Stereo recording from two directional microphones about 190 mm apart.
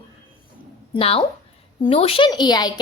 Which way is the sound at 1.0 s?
30° left (ahead or behind).